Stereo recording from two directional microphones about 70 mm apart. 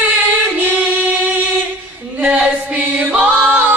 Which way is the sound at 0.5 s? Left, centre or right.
Right.